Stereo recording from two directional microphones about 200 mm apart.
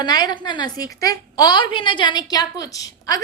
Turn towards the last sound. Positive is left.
turn(degrees=20)  # may be behind; listen again after turning